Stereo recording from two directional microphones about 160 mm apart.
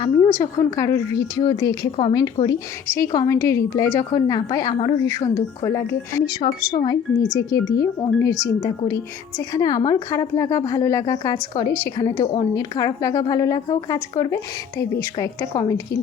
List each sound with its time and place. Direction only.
0.0 s a woman's voice: 20° left (ahead or behind)
6.4 s a woman's voice: 30° left (ahead or behind)